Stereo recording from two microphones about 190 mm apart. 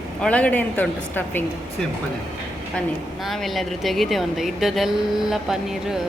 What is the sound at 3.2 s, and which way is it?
A woman's voice, centre (ahead or behind).